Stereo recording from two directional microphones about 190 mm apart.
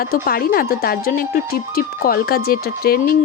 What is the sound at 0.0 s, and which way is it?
Speech, 55° left (ahead or behind).